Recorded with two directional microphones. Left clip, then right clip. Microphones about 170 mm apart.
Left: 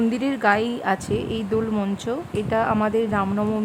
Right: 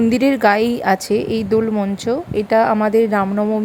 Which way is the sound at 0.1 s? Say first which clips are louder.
Right 8 dB; 30° right (ahead or behind).